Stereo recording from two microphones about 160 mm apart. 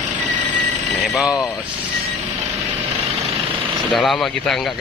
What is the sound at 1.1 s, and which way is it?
Speech, centre (ahead or behind).